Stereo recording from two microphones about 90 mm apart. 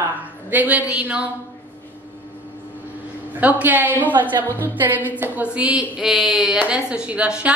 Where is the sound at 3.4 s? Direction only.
20° right (ahead or behind).